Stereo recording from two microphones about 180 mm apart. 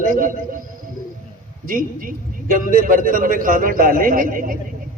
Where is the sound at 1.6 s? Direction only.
50° right (ahead or behind).